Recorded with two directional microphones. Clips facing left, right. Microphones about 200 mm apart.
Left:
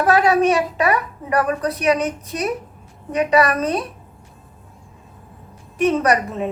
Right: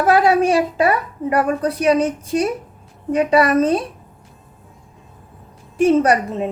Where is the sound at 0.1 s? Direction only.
30° right (ahead or behind).